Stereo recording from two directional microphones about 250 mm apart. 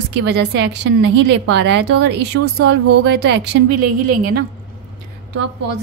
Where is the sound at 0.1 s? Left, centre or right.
Right.